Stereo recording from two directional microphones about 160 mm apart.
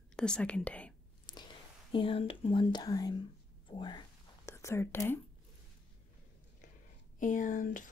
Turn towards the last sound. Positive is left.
turn(degrees=55)  # may be behind; listen again after turning